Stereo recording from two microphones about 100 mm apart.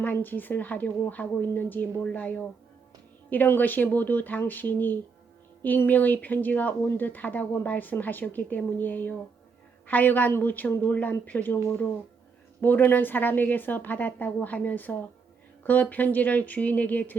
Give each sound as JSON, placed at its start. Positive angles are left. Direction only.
{"t": 0.0, "sound": "speech", "side_deg": 20}
{"t": 12.6, "sound": "speech", "side_deg": 20}